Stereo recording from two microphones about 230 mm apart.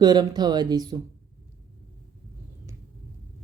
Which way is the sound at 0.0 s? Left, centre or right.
Centre.